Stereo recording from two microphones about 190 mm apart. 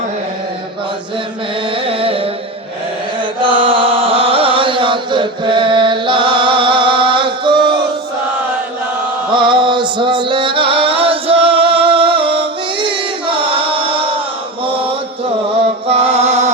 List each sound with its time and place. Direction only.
1.7 s music: 30° right (ahead or behind)
3.4 s chant: 25° right (ahead or behind)
9.3 s music: 25° right (ahead or behind)
14.6 s mantra: 30° right (ahead or behind)
15.9 s music: 30° right (ahead or behind)